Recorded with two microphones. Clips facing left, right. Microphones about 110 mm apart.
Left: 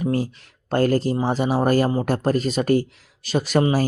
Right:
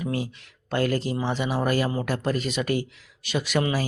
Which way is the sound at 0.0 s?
40° left (ahead or behind).